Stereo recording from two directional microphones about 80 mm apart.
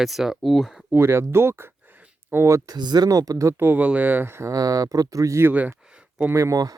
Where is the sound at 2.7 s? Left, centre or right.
Right.